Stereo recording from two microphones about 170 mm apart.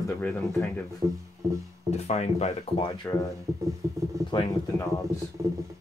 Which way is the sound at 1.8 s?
40° left (ahead or behind).